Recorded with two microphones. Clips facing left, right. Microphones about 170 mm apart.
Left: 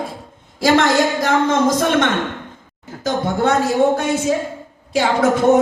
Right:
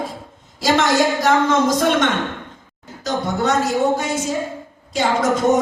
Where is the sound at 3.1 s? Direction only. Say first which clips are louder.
Left 3 dB; 50° left (ahead or behind).